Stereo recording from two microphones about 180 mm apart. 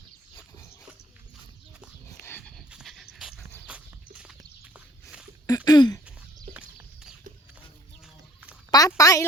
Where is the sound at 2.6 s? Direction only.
Centre (ahead or behind).